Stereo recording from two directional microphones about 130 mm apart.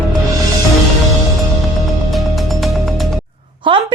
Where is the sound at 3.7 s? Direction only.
40° right (ahead or behind).